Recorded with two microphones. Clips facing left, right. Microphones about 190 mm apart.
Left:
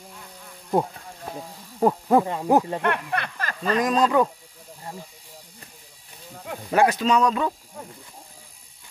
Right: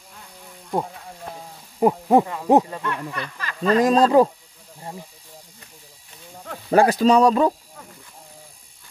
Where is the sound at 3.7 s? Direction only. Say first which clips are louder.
Right 5 dB; 30° right (ahead or behind).